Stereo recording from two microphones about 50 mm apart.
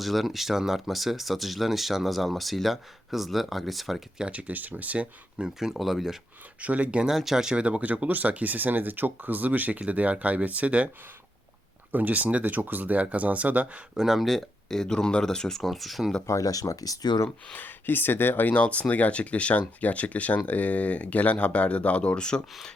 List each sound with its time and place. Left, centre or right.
0.0 s speech: centre
4.2 s speech: right
5.5 s speech: centre
6.6 s speech: right
7.1 s speech: centre
7.5 s speech: right
11.9 s speech: right
13.9 s speech: centre
16.2 s speech: left
17.6 s speech: left
18.5 s speech: left